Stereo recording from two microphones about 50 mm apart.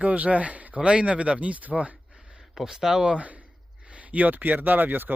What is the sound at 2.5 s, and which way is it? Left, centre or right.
Speech, centre.